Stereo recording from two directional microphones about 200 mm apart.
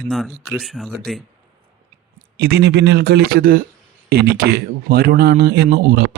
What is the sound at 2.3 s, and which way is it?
Speech, 55° right (ahead or behind).